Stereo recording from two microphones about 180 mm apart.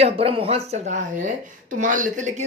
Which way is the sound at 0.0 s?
30° right (ahead or behind).